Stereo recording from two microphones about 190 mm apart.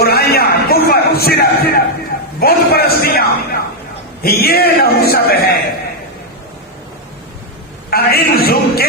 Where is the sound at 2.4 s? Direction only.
55° left (ahead or behind).